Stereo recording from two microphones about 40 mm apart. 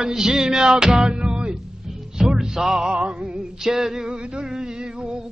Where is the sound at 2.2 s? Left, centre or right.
Centre.